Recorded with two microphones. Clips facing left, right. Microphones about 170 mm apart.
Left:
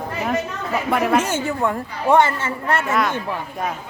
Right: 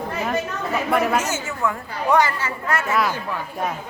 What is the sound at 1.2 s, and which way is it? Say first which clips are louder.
A woman's voice: left 4 dB; 30° left (ahead or behind).